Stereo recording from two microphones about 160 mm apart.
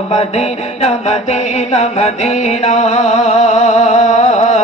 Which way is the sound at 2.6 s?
45° left (ahead or behind).